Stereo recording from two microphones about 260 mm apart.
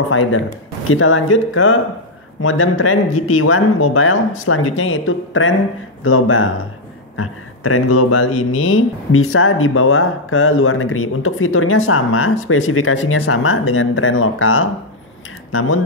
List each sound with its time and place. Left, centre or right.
0.1 s speech: left